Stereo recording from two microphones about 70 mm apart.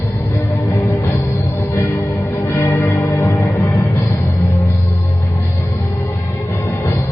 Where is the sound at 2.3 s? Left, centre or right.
Left.